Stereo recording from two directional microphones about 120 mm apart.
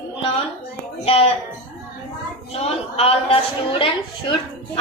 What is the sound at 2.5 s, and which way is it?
Speech, 55° left (ahead or behind).